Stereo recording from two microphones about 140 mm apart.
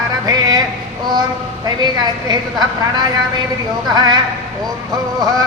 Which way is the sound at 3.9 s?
30° right (ahead or behind).